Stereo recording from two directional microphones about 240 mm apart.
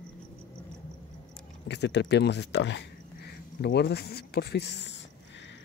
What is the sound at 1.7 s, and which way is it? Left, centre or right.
Speech, left.